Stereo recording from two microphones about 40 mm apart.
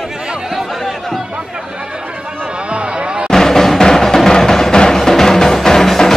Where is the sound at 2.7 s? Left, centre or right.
Right.